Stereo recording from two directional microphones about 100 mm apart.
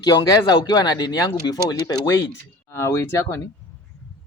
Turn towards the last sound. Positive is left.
turn(degrees=30)  # may be behind; listen again after turning